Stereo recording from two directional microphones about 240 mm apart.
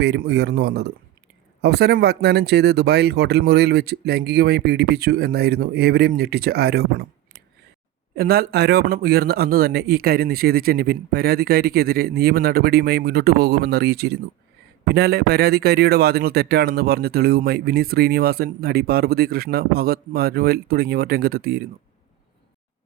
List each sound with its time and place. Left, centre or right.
0.0 s speech: right